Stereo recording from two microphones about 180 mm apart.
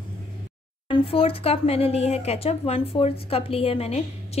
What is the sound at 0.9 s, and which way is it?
A woman's voice, 30° left (ahead or behind).